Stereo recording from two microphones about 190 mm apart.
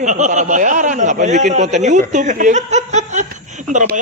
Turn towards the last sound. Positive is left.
turn(degrees=-45)  # may be behind; listen again after turning